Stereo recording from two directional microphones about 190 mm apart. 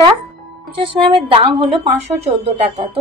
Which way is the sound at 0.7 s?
25° right (ahead or behind).